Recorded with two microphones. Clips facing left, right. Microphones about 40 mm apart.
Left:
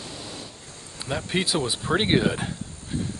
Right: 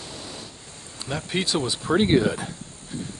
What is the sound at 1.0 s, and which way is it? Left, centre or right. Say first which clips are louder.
Speech: left 1 dB; centre.